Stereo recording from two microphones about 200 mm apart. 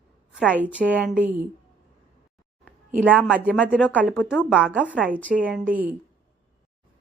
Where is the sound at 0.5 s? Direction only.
5° right (ahead or behind).